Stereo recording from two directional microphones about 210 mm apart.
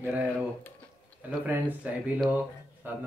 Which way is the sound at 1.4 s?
5° right (ahead or behind).